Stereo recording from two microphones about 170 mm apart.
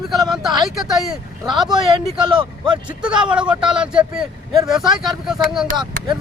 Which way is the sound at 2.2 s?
30° right (ahead or behind).